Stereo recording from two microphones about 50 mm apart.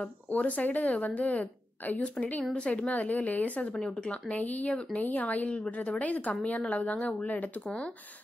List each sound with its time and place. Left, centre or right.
0.3 s a woman's voice: left